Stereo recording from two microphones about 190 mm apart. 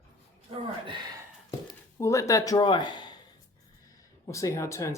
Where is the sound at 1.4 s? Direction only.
20° left (ahead or behind).